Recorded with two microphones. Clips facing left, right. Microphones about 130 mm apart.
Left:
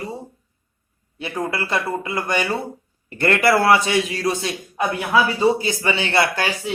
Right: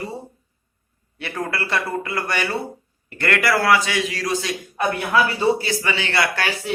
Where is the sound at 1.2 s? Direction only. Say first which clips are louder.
Left 2 dB; 20° left (ahead or behind).